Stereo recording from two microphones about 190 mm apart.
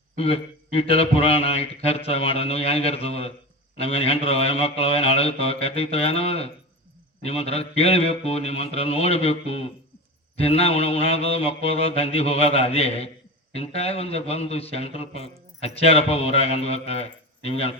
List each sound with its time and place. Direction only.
0.2 s a man's voice: 30° left (ahead or behind)